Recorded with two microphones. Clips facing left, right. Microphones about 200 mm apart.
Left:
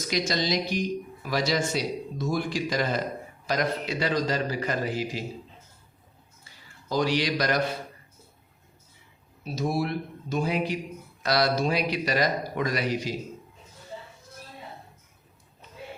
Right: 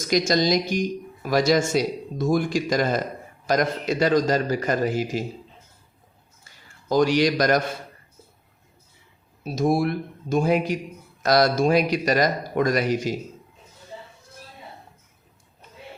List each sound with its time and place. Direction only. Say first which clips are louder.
0.1 s speech: right 7 dB; 45° right (ahead or behind)
6.8 s speech: right 6 dB; 50° right (ahead or behind)
9.4 s speech: right 6 dB; 50° right (ahead or behind)